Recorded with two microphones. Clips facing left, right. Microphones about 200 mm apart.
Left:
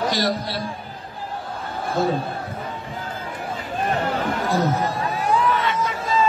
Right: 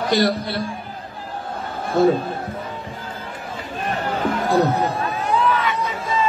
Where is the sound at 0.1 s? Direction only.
55° right (ahead or behind).